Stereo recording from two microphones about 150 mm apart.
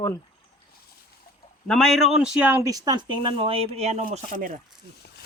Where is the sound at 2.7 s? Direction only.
25° right (ahead or behind); by 4.5 s 60° right (ahead or behind).